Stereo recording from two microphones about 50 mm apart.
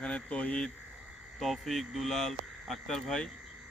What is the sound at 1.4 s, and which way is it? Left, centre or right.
Speech, centre.